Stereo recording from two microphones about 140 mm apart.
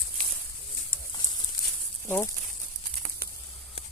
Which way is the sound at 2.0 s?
15° left (ahead or behind).